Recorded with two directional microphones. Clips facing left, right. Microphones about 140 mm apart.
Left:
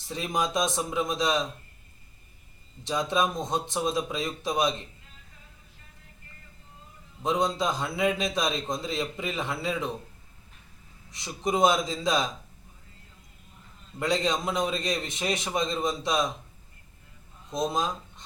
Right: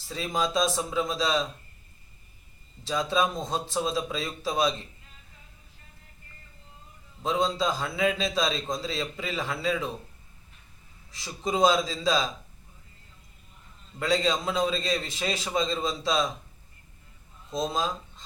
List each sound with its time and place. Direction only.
0.1 s a man's voice: 15° left (ahead or behind)
2.8 s a man's voice: 20° left (ahead or behind)
7.2 s a man's voice: 15° left (ahead or behind)
11.1 s a man's voice: 15° left (ahead or behind)
14.0 s a man's voice: 20° left (ahead or behind)
17.5 s a man's voice: 15° left (ahead or behind)